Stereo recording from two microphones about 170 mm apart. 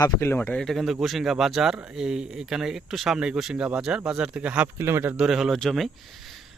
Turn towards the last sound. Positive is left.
turn(degrees=0)  # may be behind; listen again after turning